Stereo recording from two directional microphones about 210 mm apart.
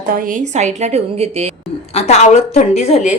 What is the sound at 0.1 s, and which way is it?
Speech, 40° right (ahead or behind).